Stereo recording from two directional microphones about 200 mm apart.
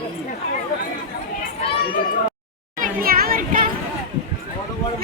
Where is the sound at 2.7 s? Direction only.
45° right (ahead or behind).